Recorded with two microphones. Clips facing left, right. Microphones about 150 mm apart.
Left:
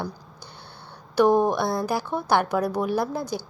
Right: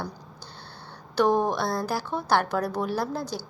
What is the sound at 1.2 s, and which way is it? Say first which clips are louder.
Speech: left 4 dB; 10° left (ahead or behind).